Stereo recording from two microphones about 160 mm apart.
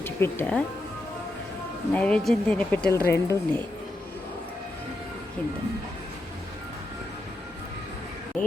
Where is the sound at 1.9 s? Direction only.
10° left (ahead or behind).